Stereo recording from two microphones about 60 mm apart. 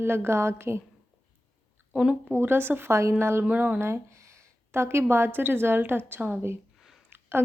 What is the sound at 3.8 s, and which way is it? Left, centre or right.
A woman's voice, right.